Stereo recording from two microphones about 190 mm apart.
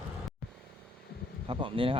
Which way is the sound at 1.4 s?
30° right (ahead or behind).